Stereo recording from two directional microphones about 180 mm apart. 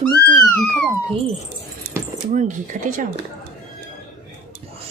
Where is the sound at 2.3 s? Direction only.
45° right (ahead or behind).